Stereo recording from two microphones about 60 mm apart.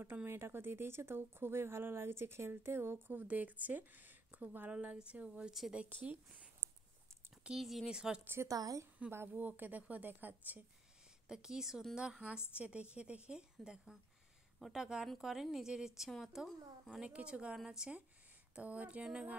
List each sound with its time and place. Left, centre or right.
0.0 s a woman's voice: right
7.5 s speech: centre
7.9 s a woman's voice: centre
8.2 s speech: right
8.5 s speech: right
9.3 s a woman's voice: right
11.2 s a woman's voice: centre
17.0 s a woman's voice: centre
18.5 s a woman's voice: right